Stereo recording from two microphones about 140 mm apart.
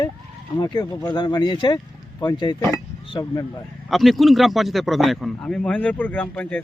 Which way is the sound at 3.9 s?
Centre (ahead or behind).